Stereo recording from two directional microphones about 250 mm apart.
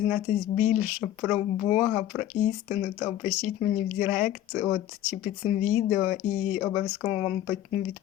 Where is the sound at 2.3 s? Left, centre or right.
Left.